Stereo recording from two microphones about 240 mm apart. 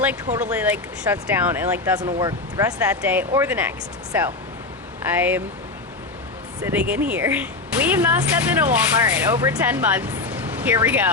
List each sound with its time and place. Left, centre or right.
0.5 s speech: centre
5.1 s speech: centre
6.6 s speech: centre